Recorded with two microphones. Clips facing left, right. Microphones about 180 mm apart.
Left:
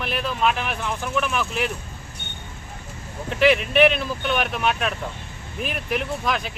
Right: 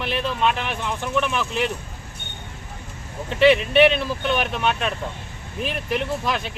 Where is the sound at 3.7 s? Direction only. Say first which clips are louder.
Right 1 dB; centre (ahead or behind).